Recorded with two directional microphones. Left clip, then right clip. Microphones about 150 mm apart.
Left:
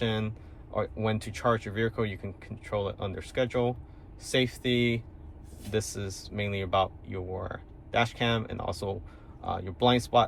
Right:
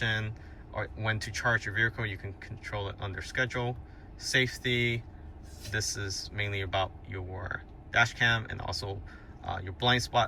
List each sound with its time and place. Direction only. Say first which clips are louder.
0.0 s speech: even; 20° left (ahead or behind)